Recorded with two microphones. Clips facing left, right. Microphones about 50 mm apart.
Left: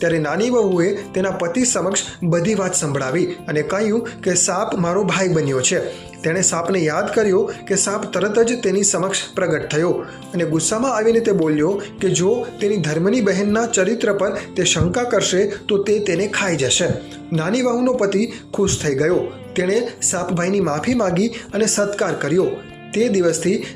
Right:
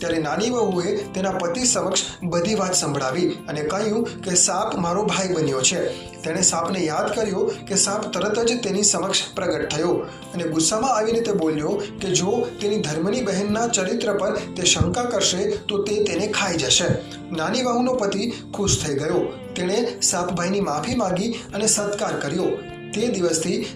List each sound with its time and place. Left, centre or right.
0.0 s speech: left
9.0 s speech: centre
9.4 s speech: left
11.4 s speech: left
12.5 s speech: left
13.5 s speech: left
18.0 s speech: left
19.1 s speech: left